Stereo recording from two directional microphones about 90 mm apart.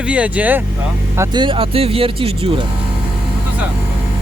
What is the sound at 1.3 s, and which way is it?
Speech, 65° right (ahead or behind).